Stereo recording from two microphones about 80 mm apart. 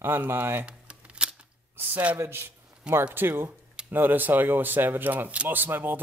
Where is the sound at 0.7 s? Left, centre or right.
Centre.